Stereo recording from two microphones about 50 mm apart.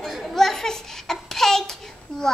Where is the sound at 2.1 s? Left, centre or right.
Centre.